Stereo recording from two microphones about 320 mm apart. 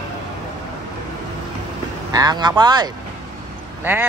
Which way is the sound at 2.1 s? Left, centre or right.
Centre.